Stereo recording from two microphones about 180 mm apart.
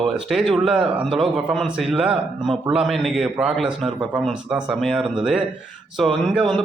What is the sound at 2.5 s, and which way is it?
Speech, 30° right (ahead or behind).